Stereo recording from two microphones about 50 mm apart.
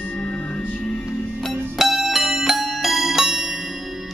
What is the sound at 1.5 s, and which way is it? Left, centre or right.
Music, centre.